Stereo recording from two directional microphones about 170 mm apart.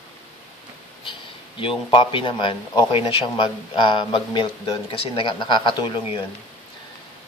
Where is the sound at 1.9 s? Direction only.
30° left (ahead or behind).